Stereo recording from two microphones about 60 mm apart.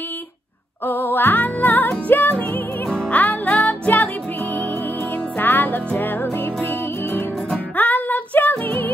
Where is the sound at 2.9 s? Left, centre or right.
Centre; by 7.3 s left.